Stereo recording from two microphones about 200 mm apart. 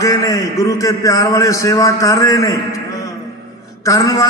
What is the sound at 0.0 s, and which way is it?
A man's voice, 15° left (ahead or behind).